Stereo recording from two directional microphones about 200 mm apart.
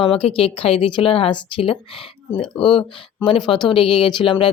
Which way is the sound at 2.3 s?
5° left (ahead or behind).